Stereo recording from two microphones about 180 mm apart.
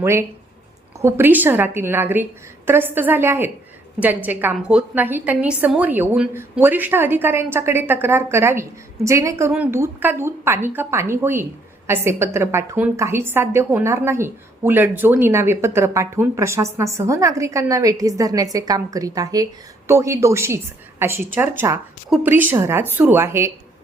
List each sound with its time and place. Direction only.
0.0 s a woman's voice: 15° right (ahead or behind)